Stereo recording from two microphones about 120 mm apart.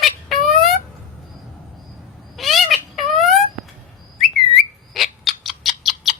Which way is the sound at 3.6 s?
Centre (ahead or behind).